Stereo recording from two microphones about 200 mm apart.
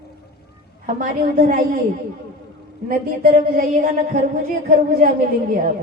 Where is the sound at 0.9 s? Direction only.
45° right (ahead or behind).